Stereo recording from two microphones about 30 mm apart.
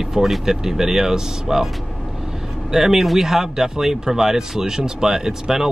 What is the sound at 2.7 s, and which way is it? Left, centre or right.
Speech, centre.